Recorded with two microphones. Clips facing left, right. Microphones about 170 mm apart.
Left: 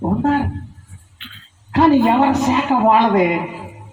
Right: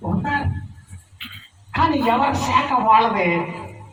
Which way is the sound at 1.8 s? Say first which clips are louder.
Left 6 dB; 50° left (ahead or behind).